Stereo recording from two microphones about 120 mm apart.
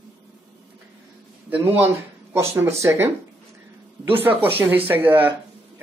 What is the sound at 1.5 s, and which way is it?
A woman's voice, 15° right (ahead or behind).